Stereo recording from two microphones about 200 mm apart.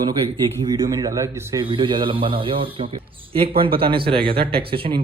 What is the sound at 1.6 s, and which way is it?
Speech, 25° right (ahead or behind).